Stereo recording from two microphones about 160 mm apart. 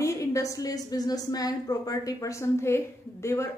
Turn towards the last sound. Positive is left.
turn(degrees=15)  # may be behind; listen again after turning